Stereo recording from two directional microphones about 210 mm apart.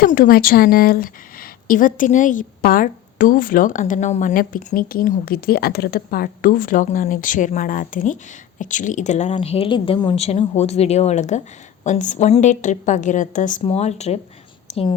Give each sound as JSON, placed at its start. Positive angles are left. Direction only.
{"t": 0.0, "sound": "a woman's voice", "side_deg": 45}